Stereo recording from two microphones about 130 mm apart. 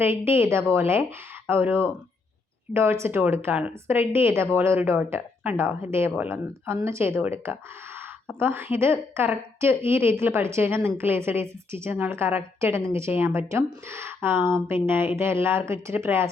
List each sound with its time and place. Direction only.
0.0 s a woman's voice: 20° right (ahead or behind)